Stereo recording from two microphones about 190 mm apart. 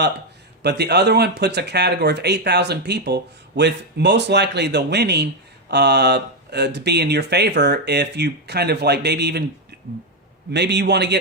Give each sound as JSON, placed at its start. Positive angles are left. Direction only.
{"t": 0.6, "sound": "speech", "side_deg": -60}
{"t": 9.7, "sound": "finger snapping", "side_deg": -60}
{"t": 10.5, "sound": "speech", "side_deg": -65}